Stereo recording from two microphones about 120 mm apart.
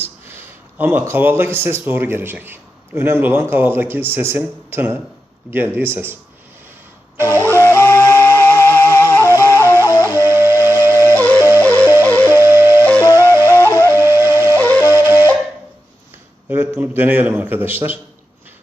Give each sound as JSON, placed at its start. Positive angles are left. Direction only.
{"t": 0.3, "sound": "speech", "side_deg": -20}
{"t": 7.2, "sound": "speech", "side_deg": -20}
{"t": 7.5, "sound": "music", "side_deg": 25}
{"t": 10.0, "sound": "flute", "side_deg": -20}
{"t": 11.2, "sound": "music", "side_deg": 15}
{"t": 12.3, "sound": "wind instrument", "side_deg": -20}
{"t": 13.1, "sound": "music", "side_deg": 25}
{"t": 13.9, "sound": "wind instrument", "side_deg": -20}
{"t": 14.6, "sound": "flute", "side_deg": 15}
{"t": 14.8, "sound": "flute", "side_deg": -20}
{"t": 16.5, "sound": "a man's voice", "side_deg": -20}